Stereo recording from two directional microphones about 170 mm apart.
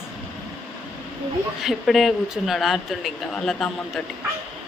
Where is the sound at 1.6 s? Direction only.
Centre (ahead or behind).